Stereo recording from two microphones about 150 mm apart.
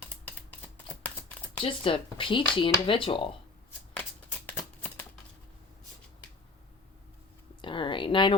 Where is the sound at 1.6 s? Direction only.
35° left (ahead or behind).